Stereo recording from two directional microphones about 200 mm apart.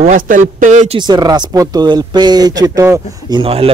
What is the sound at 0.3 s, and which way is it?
Speech, 40° right (ahead or behind).